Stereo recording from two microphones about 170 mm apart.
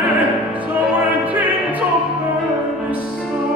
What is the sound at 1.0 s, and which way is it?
Music, 10° right (ahead or behind).